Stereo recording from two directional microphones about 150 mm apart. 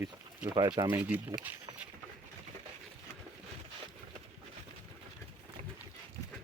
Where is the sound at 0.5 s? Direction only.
30° right (ahead or behind).